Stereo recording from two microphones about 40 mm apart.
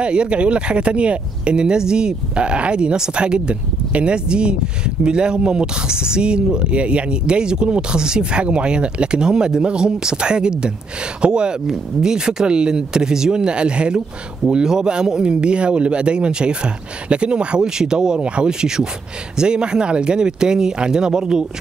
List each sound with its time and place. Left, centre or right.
0.0 s speech: right
11.6 s speech: centre